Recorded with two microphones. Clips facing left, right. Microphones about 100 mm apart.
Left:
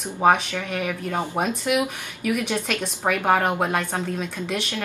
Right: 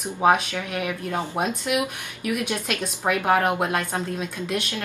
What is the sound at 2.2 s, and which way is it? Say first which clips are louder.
Speech: left 2 dB; centre (ahead or behind).